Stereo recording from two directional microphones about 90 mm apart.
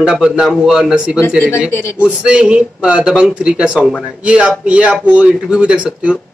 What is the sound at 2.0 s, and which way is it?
A man's voice, 10° right (ahead or behind).